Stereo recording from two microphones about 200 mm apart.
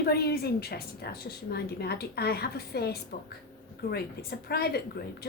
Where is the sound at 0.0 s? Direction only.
50° left (ahead or behind).